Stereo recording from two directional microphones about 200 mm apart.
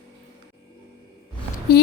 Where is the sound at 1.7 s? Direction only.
50° left (ahead or behind).